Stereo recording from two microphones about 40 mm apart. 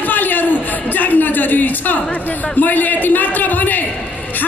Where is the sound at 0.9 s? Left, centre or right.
Left.